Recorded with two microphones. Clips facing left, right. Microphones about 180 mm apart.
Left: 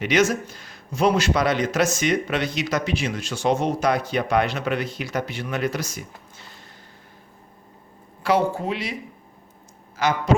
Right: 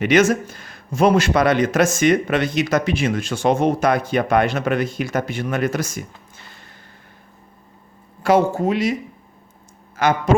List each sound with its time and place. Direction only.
0.0 s a man's voice: 50° right (ahead or behind)
8.2 s a man's voice: 45° right (ahead or behind)
10.0 s a man's voice: 50° right (ahead or behind)